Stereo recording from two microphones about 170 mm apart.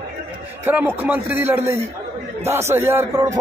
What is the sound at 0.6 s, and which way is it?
A man's voice, 10° right (ahead or behind).